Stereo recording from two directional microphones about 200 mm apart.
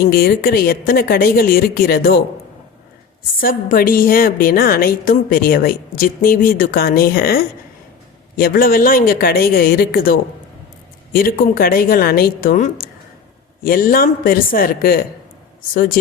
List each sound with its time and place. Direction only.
0.0 s a woman's voice: 50° left (ahead or behind)
3.4 s a woman's voice: 45° left (ahead or behind)